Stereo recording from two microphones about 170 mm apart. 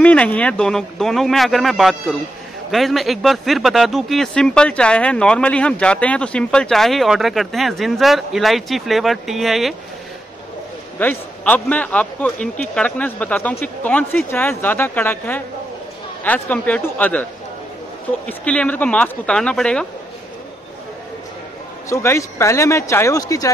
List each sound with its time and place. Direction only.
0.0 s speech: 5° left (ahead or behind)
11.0 s a man's voice: 10° left (ahead or behind)
18.4 s a man's voice: 5° left (ahead or behind)
21.8 s a man's voice: 15° left (ahead or behind)